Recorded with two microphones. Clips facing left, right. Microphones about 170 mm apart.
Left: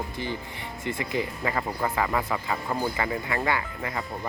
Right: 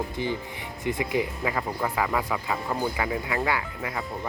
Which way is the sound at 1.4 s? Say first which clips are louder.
Even; 5° right (ahead or behind).